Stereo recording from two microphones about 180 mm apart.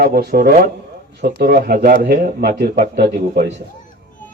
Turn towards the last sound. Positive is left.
turn(degrees=-60)  # may be behind; listen again after turning